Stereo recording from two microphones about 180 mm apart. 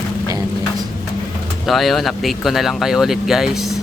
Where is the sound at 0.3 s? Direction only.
20° right (ahead or behind).